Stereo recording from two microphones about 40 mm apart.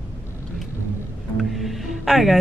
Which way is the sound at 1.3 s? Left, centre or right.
Centre.